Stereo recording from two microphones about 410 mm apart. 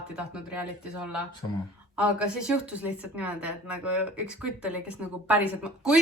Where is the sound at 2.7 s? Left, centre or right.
Centre.